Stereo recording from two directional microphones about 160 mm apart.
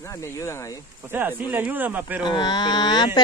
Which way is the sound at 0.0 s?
20° left (ahead or behind).